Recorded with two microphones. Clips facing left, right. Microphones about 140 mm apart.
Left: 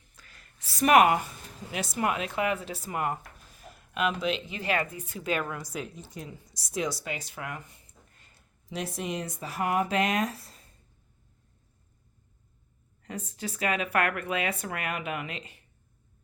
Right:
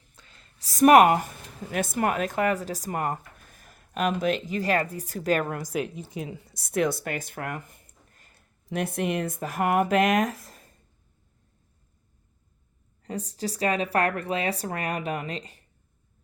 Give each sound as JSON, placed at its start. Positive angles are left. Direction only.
{"t": 0.2, "sound": "a sound", "side_deg": -25}
{"t": 0.6, "sound": "speech", "side_deg": -45}
{"t": 5.5, "sound": "a woman's voice", "side_deg": -65}
{"t": 8.7, "sound": "speech", "side_deg": -55}
{"t": 13.0, "sound": "speech", "side_deg": -35}